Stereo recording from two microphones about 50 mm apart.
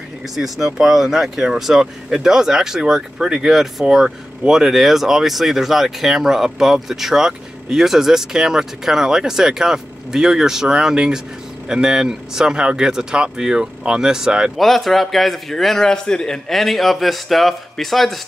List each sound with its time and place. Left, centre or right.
0.4 s speech: centre
14.6 s a man's voice: centre
16.4 s a man's voice: centre